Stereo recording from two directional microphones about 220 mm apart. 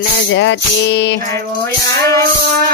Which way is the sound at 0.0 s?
55° left (ahead or behind).